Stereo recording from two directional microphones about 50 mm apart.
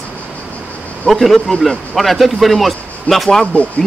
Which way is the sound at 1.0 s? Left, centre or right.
Centre.